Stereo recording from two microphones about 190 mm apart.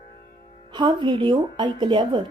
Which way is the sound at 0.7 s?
25° right (ahead or behind).